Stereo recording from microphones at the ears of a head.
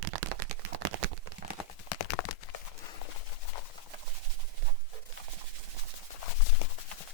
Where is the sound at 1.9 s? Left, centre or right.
Left.